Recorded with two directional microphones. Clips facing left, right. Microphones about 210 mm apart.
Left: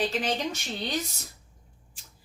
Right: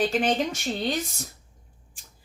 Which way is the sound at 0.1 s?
50° right (ahead or behind).